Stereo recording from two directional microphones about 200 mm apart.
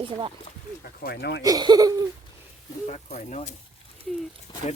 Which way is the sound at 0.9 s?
50° left (ahead or behind).